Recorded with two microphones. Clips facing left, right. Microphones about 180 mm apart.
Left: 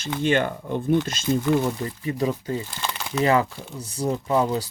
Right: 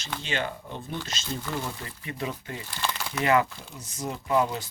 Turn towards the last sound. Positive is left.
turn(degrees=35)  # may be behind; listen again after turning